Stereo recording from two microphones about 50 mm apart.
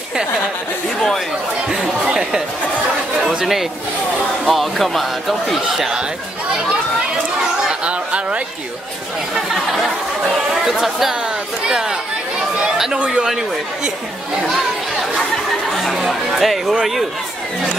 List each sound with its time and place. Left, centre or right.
3.2 s speech: centre
7.8 s a sound: right
9.3 s speech: centre
12.9 s speech: centre
15.1 s music: centre
16.0 s speech: centre